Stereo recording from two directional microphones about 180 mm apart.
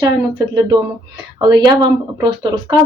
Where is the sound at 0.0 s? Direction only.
20° right (ahead or behind).